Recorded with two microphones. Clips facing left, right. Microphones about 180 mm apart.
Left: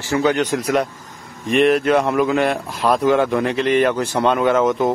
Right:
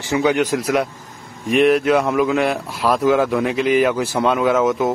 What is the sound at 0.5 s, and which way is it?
A man's voice, centre (ahead or behind).